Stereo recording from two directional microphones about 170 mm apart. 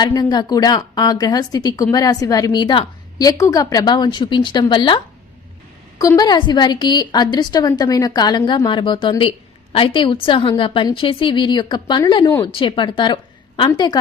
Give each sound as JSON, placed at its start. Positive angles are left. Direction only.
{"t": 0.0, "sound": "a woman's voice", "side_deg": 25}
{"t": 6.0, "sound": "a woman's voice", "side_deg": 20}